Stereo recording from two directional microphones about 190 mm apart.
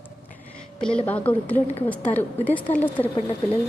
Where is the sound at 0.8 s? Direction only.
5° left (ahead or behind).